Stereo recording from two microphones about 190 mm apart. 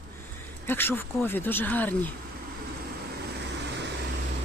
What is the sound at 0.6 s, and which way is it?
Speech, 10° left (ahead or behind).